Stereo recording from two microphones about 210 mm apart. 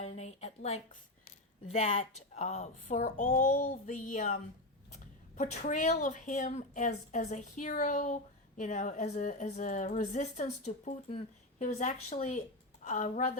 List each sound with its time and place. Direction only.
0.3 s a sound: 30° left (ahead or behind)
1.7 s a woman's voice: 30° left (ahead or behind)
5.4 s a woman's voice: 35° left (ahead or behind)